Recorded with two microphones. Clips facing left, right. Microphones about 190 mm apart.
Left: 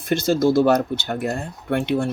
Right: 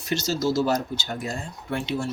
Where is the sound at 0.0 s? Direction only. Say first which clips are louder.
Left 7 dB; 55° left (ahead or behind).